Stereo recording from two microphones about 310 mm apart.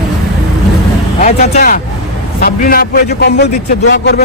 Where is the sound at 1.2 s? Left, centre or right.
Left.